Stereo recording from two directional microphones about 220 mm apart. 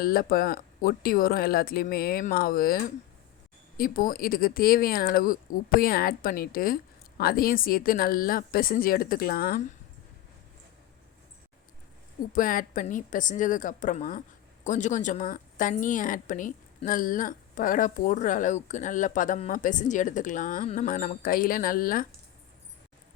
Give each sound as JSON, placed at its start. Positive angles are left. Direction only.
{"t": 0.0, "sound": "a woman's voice", "side_deg": 40}
{"t": 12.3, "sound": "a woman's voice", "side_deg": 40}